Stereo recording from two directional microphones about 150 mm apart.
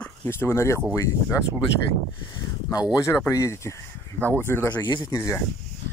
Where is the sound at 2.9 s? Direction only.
20° left (ahead or behind).